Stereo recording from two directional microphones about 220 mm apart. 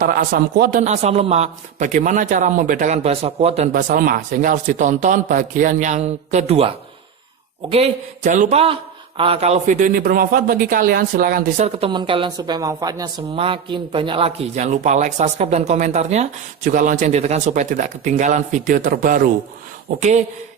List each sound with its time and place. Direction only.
0.0 s speech: 40° right (ahead or behind)
7.7 s speech: 30° right (ahead or behind)
11.9 s speech: 20° right (ahead or behind)